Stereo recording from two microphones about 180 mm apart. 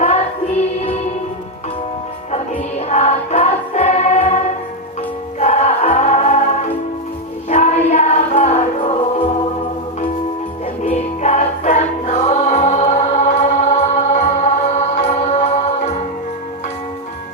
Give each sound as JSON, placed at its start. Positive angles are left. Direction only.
{"t": 0.8, "sound": "music", "side_deg": 35}
{"t": 2.3, "sound": "music", "side_deg": 40}
{"t": 5.4, "sound": "music", "side_deg": 40}
{"t": 10.8, "sound": "music", "side_deg": 40}